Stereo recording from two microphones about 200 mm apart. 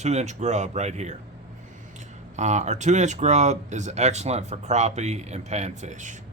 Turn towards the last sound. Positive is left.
turn(degrees=-40)  # may be behind; listen again after turning